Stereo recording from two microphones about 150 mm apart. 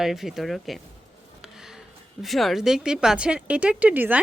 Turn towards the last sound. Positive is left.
turn(degrees=-10)  # may be behind; listen again after turning